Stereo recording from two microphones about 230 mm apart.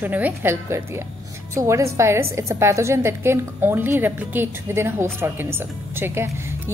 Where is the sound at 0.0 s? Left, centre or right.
Centre.